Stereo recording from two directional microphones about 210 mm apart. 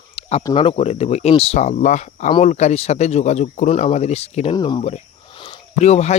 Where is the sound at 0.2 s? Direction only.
30° left (ahead or behind).